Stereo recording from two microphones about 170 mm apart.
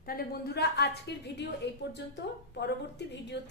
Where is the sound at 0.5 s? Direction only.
75° left (ahead or behind).